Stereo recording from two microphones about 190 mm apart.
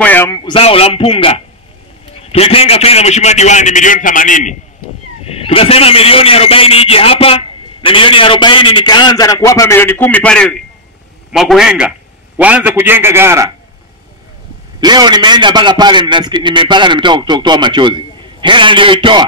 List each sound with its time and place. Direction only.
0.0 s a man's voice: 10° left (ahead or behind)
0.5 s a man's voice: 30° left (ahead or behind)
2.3 s a man's voice: 30° left (ahead or behind)
5.2 s a man's voice: 30° left (ahead or behind); by 13.5 s 15° right (ahead or behind)
14.8 s a man's voice: 20° right (ahead or behind)